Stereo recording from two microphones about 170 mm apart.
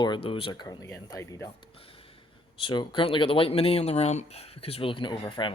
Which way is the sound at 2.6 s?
30° left (ahead or behind).